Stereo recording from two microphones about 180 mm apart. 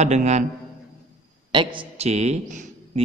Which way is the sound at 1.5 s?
25° right (ahead or behind).